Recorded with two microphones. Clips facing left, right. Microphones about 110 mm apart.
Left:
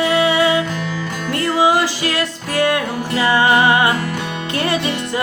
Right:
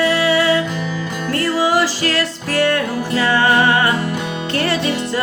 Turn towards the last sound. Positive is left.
turn(degrees=15)  # may be behind; listen again after turning